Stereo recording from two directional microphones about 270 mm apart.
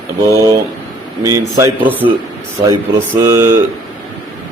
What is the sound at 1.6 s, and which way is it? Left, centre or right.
Speech, centre.